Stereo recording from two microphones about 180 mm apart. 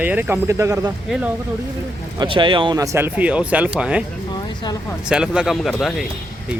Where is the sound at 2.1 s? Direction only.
30° right (ahead or behind); by 4.0 s 5° right (ahead or behind).